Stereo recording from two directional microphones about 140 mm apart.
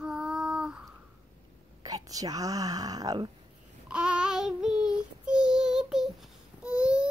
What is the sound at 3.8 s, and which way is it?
Child singing, 5° right (ahead or behind).